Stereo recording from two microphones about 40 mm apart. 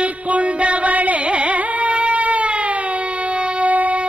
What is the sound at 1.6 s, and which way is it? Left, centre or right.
Music, right.